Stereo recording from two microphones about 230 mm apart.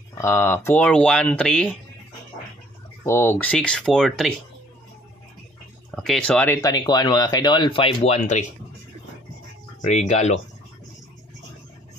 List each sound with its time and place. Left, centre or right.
0.2 s speech: centre
3.0 s speech: centre
5.9 s speech: centre; by 8.5 s left
9.8 s speech: left